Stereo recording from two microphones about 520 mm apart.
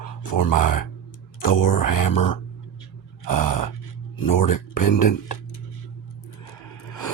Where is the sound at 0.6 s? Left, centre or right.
Left.